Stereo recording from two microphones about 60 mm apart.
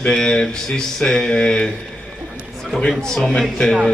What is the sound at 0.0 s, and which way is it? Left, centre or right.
Speech, centre.